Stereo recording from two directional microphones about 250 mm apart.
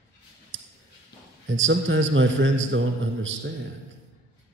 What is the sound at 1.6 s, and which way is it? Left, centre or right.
A man's voice, right.